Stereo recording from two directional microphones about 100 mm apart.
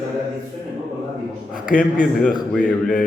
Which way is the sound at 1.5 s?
10° left (ahead or behind).